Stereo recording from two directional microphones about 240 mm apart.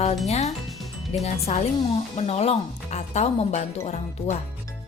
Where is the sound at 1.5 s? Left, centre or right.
Left.